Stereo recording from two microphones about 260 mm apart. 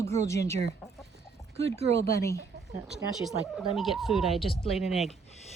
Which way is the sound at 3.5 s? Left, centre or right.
Centre.